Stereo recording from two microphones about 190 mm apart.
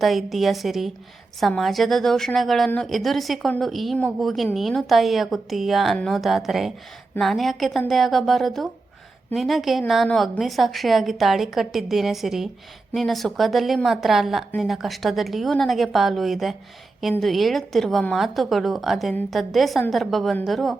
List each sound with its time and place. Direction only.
0.0 s a woman's voice: centre (ahead or behind)